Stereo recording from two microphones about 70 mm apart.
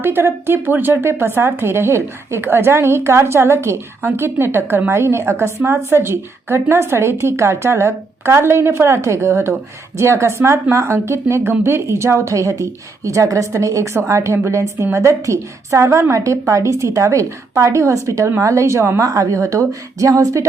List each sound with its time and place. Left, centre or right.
0.0 s a woman's voice: right